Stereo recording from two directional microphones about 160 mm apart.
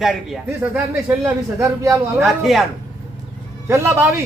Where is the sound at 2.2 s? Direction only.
Centre (ahead or behind).